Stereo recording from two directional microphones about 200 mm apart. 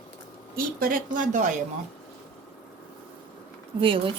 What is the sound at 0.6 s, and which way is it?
Speech, 45° right (ahead or behind).